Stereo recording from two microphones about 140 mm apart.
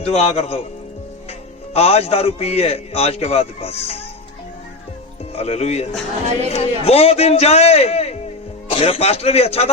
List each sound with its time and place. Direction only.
0.0 s a man's voice: 50° left (ahead or behind)
5.3 s a man's voice: 50° left (ahead or behind)